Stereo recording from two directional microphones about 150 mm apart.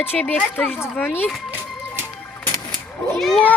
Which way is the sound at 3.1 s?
Centre (ahead or behind).